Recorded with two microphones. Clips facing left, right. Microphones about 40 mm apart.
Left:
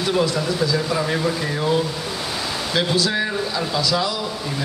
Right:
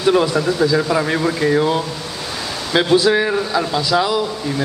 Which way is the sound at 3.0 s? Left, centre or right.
Right.